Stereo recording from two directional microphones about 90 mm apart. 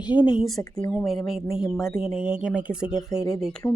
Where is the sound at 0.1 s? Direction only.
15° right (ahead or behind).